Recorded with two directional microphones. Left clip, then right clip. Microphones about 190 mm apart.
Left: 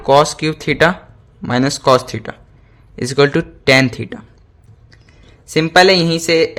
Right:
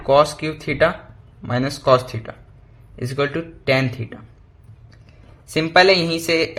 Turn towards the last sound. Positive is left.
turn(degrees=20)  # may be behind; listen again after turning